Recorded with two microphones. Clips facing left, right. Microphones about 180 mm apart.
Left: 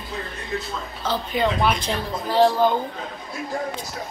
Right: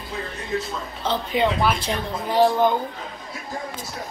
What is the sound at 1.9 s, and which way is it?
Speech, 15° right (ahead or behind).